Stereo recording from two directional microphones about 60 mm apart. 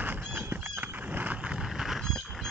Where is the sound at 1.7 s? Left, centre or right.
Centre.